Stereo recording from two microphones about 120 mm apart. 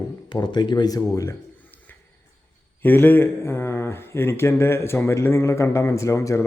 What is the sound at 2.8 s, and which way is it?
Speech, 15° left (ahead or behind).